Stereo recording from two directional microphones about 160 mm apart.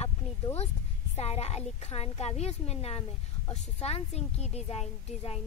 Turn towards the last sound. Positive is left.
turn(degrees=40)  # may be behind; listen again after turning